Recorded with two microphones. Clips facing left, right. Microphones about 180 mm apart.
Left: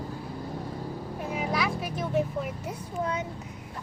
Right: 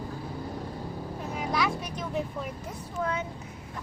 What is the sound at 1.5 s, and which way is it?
Speech, centre (ahead or behind).